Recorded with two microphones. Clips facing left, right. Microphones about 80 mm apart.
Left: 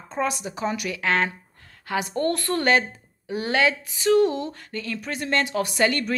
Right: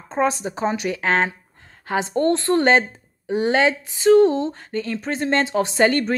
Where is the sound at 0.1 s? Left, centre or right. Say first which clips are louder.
Right 5 dB; right.